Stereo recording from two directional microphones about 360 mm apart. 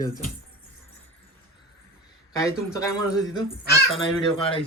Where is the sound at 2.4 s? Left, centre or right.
Centre.